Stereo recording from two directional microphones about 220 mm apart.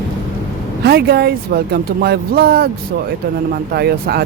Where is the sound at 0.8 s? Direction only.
45° right (ahead or behind).